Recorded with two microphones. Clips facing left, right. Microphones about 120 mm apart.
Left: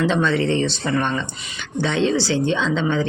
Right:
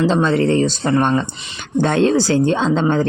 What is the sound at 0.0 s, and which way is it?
Speech, 35° right (ahead or behind).